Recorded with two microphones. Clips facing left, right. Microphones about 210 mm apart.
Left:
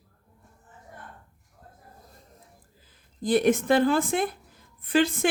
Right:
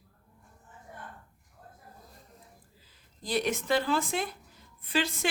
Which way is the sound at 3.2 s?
50° left (ahead or behind).